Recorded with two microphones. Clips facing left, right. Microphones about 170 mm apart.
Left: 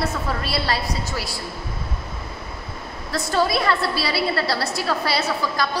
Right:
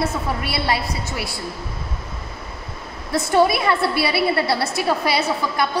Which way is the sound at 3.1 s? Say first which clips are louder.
Right 5 dB; 20° right (ahead or behind).